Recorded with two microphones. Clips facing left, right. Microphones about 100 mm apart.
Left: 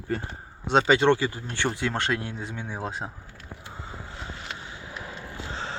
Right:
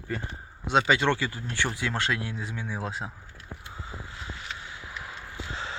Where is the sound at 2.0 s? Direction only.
40° left (ahead or behind).